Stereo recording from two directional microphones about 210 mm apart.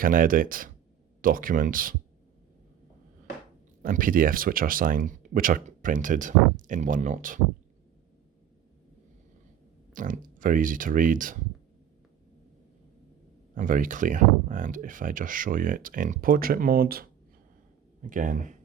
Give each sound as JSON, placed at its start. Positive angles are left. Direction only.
{"t": 0.0, "sound": "speech", "side_deg": -40}
{"t": 3.8, "sound": "speech", "side_deg": -40}
{"t": 9.9, "sound": "speech", "side_deg": -40}
{"t": 13.6, "sound": "speech", "side_deg": -40}